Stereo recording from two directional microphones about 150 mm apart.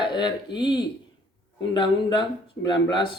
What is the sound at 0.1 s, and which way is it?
Speech, 30° left (ahead or behind).